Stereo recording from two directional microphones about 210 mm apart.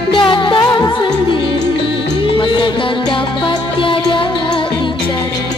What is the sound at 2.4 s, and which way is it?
Music, 25° left (ahead or behind).